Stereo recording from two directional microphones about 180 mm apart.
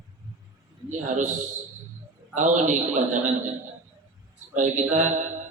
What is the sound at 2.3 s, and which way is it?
A man's voice, 45° right (ahead or behind).